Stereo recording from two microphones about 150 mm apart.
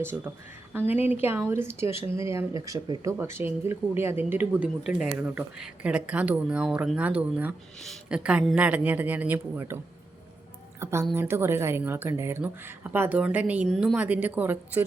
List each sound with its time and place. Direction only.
0.9 s speech: 10° right (ahead or behind)
11.1 s speech: 15° right (ahead or behind)